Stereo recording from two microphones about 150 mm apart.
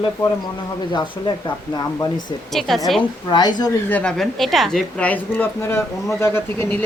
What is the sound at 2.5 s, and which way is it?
Speech, centre (ahead or behind).